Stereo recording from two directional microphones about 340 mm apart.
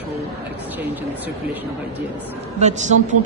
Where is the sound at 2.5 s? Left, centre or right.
Centre.